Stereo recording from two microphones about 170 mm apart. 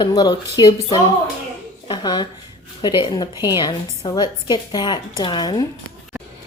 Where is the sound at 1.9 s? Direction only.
25° left (ahead or behind).